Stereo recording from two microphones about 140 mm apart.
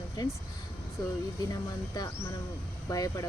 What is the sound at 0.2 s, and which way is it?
Speech, 30° left (ahead or behind).